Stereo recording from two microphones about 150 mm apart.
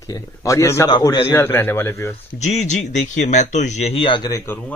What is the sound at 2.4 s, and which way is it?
Speech, 50° left (ahead or behind).